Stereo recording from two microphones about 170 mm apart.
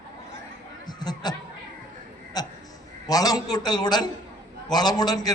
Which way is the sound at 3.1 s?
20° left (ahead or behind).